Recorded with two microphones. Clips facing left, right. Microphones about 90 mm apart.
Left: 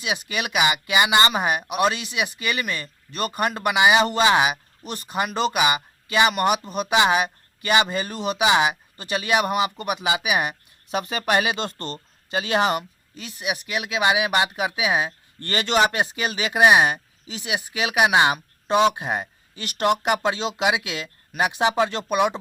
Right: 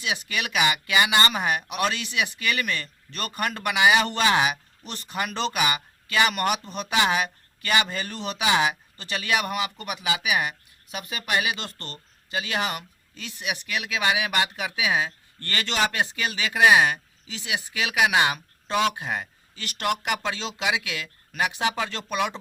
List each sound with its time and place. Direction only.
0.0 s speech: 20° left (ahead or behind)
11.0 s speech: 35° left (ahead or behind)
13.1 s speech: 15° left (ahead or behind)